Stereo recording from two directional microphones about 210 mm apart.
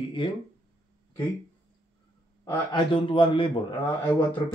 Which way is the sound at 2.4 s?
20° left (ahead or behind).